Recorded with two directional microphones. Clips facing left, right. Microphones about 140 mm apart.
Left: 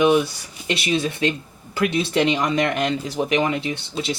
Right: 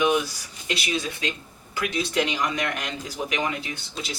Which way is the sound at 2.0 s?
30° left (ahead or behind).